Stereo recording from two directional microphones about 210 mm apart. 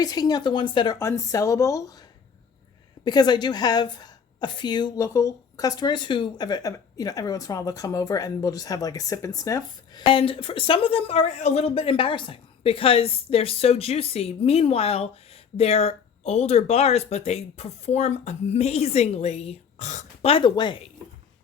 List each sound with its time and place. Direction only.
0.0 s a woman's voice: 20° left (ahead or behind)
3.0 s a woman's voice: 20° left (ahead or behind)